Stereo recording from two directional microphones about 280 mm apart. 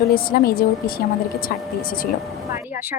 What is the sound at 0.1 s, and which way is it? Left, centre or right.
Speech, left.